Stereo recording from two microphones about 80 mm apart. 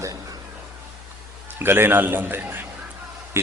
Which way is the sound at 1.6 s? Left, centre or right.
Right.